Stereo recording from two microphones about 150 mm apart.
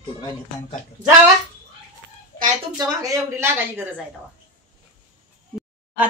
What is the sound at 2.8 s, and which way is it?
A woman's voice, 25° right (ahead or behind).